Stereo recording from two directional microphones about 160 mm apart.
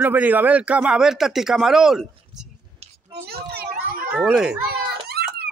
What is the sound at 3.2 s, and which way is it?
Children playing, 75° right (ahead or behind).